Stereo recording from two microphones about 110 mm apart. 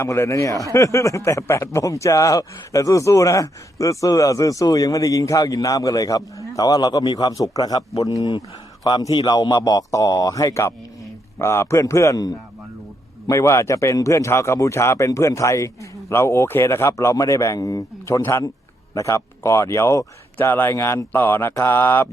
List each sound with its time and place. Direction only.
0.0 s a man's voice: 25° left (ahead or behind)